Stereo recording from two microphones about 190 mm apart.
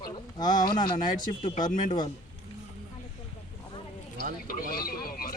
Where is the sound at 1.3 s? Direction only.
45° left (ahead or behind).